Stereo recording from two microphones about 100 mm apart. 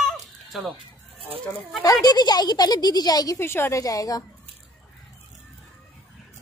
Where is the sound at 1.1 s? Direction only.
65° right (ahead or behind).